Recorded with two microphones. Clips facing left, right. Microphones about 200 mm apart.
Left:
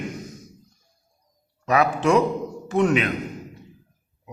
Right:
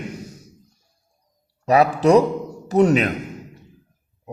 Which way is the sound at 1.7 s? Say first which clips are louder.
Right 5 dB; 35° right (ahead or behind).